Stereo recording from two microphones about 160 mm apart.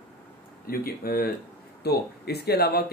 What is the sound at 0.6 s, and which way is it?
Speech, 70° left (ahead or behind).